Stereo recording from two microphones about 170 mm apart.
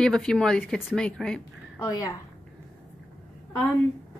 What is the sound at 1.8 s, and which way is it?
Speech, 20° left (ahead or behind).